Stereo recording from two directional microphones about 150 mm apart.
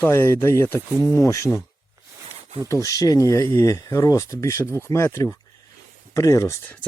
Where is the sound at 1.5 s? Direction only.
Centre (ahead or behind).